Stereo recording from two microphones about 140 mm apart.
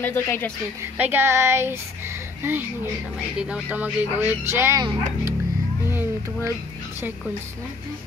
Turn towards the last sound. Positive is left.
turn(degrees=-15)  # may be behind; listen again after turning